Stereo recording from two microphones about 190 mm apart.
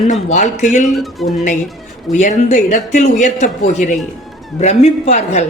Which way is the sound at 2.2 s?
40° left (ahead or behind).